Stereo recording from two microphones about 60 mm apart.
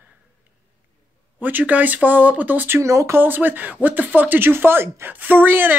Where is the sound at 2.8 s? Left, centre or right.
Right.